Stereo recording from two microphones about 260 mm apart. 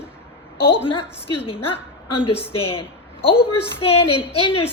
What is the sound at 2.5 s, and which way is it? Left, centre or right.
A woman's voice, left.